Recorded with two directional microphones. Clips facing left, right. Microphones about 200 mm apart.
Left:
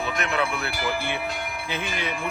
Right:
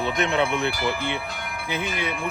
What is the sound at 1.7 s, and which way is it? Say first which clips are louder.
Speech: right 3 dB; 10° right (ahead or behind).